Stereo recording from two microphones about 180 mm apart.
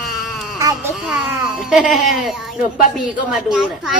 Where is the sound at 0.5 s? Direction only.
15° right (ahead or behind).